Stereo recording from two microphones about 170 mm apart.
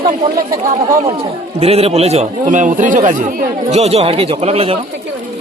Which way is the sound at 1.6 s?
35° right (ahead or behind).